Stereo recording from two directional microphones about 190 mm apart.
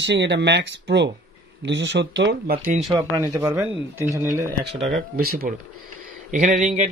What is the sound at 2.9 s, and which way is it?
Speech, 20° right (ahead or behind).